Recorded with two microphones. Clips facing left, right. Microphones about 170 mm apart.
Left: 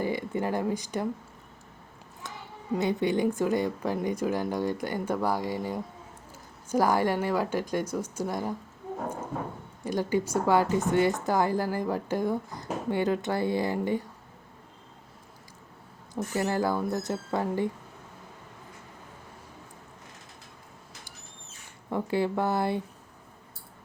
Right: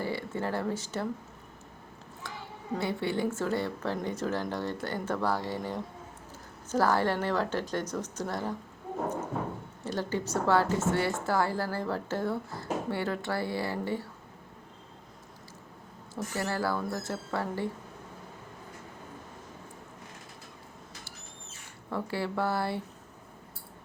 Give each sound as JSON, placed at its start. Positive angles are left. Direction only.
{"t": 0.0, "sound": "speech", "side_deg": 15}
{"t": 2.2, "sound": "a sound", "side_deg": 20}
{"t": 2.7, "sound": "speech", "side_deg": 15}
{"t": 9.8, "sound": "speech", "side_deg": 15}
{"t": 16.1, "sound": "speech", "side_deg": 20}
{"t": 21.8, "sound": "speech", "side_deg": 20}